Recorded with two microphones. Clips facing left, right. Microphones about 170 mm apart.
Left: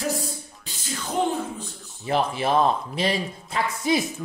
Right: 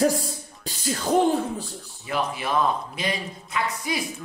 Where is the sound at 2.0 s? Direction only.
30° left (ahead or behind).